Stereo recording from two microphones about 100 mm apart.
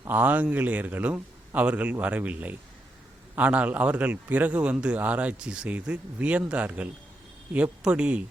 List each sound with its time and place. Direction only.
0.1 s a man's voice: 15° right (ahead or behind)